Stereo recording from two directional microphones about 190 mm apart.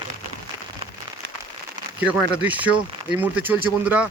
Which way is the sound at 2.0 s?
10° right (ahead or behind).